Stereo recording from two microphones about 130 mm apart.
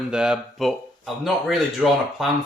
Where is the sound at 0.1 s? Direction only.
5° right (ahead or behind).